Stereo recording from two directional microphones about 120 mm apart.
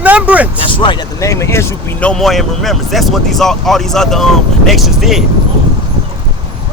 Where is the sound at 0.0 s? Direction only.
10° right (ahead or behind).